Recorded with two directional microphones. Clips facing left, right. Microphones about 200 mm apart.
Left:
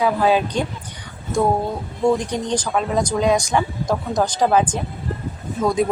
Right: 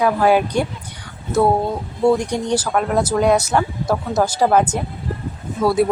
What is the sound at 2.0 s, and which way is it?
A woman's voice, 10° right (ahead or behind).